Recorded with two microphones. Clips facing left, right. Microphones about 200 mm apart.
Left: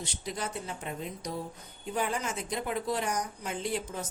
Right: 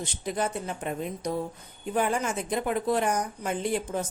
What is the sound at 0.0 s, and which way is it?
Speech, 55° right (ahead or behind).